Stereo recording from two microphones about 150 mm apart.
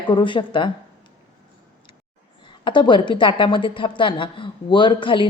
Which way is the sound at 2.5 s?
30° left (ahead or behind).